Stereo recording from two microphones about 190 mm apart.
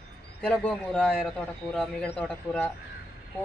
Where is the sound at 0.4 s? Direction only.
5° left (ahead or behind).